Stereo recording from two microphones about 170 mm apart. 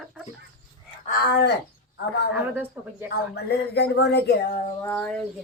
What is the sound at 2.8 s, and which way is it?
Speech, 10° right (ahead or behind).